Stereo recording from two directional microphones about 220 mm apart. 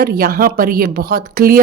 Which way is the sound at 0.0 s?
45° right (ahead or behind).